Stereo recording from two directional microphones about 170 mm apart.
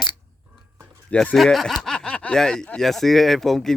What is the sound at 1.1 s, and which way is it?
Speech, 5° left (ahead or behind).